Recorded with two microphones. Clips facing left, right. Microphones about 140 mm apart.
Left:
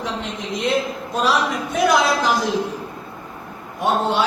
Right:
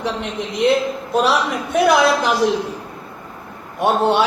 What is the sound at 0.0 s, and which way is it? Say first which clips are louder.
A man's voice: right 3 dB; 65° right (ahead or behind).